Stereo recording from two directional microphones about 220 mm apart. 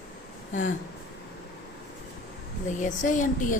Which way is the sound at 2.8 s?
35° left (ahead or behind).